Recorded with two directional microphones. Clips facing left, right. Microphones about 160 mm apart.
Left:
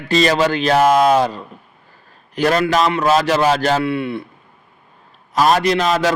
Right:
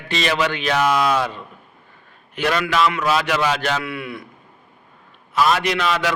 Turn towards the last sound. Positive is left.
turn(degrees=40)  # may be behind; listen again after turning